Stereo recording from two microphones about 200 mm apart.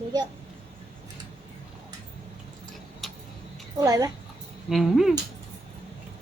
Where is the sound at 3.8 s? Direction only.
15° right (ahead or behind).